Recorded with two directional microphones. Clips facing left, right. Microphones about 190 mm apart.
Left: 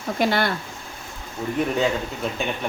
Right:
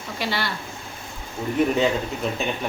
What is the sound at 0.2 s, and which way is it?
Speech, 50° left (ahead or behind).